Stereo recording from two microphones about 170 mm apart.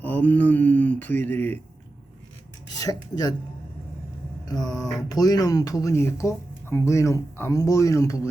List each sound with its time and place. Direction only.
0.0 s mantra: 10° left (ahead or behind)
2.7 s speech: 20° left (ahead or behind)
4.4 s speech: 20° left (ahead or behind)